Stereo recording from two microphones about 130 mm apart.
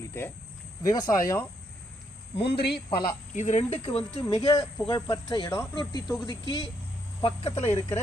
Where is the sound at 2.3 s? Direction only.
45° left (ahead or behind).